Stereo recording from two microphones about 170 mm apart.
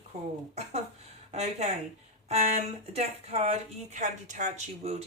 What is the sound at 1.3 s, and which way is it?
Speech, 40° right (ahead or behind).